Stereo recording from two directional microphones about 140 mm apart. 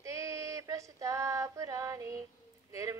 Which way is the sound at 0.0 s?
20° right (ahead or behind).